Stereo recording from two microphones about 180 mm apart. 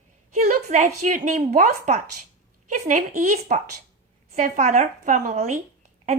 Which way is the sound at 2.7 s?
45° right (ahead or behind).